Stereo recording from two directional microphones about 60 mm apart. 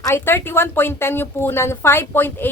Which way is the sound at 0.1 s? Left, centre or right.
Left.